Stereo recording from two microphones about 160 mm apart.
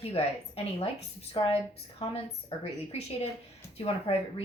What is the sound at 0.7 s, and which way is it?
A woman's voice, 40° left (ahead or behind).